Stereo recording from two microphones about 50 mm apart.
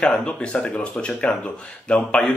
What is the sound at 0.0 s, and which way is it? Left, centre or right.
Speech, centre.